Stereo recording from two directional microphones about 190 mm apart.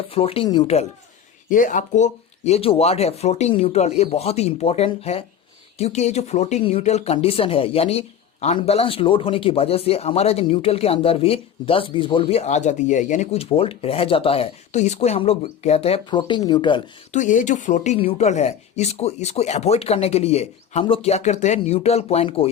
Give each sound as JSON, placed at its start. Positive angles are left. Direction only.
{"t": 0.1, "sound": "speech", "side_deg": 30}
{"t": 1.5, "sound": "speech", "side_deg": 45}
{"t": 17.1, "sound": "speech", "side_deg": 40}